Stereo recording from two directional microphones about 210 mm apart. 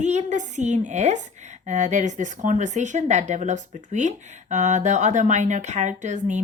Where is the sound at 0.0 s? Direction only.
35° right (ahead or behind).